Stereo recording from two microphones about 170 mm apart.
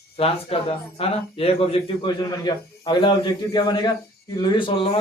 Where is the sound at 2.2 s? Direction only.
25° left (ahead or behind).